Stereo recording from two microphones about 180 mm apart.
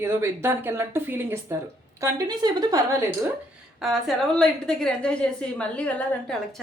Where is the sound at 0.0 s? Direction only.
15° right (ahead or behind).